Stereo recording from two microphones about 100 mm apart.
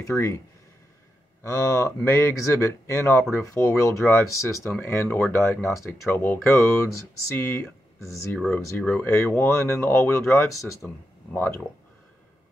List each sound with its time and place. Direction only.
0.0 s speech: 30° left (ahead or behind)
1.4 s speech: 30° left (ahead or behind)
9.0 s speech: 25° left (ahead or behind)